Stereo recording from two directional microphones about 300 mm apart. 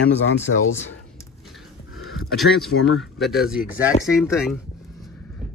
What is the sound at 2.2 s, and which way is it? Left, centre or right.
Speech, centre.